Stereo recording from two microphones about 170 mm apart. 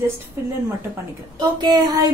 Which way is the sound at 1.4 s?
25° right (ahead or behind).